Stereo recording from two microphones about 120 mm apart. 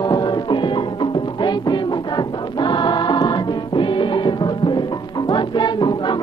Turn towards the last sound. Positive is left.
turn(degrees=40)  # may be behind; listen again after turning